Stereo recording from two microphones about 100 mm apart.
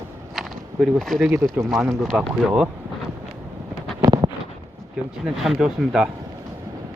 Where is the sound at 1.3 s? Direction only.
25° right (ahead or behind).